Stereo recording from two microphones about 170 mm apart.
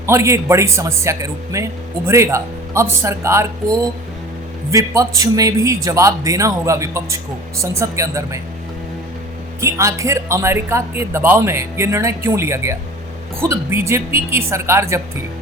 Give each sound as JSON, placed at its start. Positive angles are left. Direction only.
{"t": 0.0, "sound": "a man's voice", "side_deg": -15}
{"t": 9.6, "sound": "speech", "side_deg": -15}